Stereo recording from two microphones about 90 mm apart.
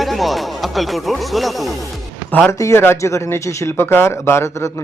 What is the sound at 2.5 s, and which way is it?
Speech, 30° left (ahead or behind).